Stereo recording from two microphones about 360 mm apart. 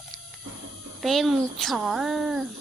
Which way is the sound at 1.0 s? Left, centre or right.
Centre.